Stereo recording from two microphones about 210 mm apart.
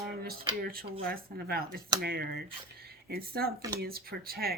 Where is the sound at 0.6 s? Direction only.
45° right (ahead or behind).